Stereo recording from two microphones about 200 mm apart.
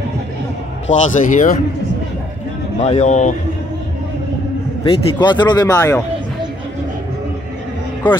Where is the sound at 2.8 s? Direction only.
35° left (ahead or behind).